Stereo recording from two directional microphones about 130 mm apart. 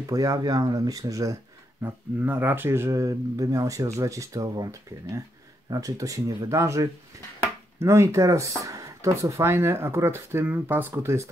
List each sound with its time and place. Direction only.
0.0 s speech: 25° right (ahead or behind)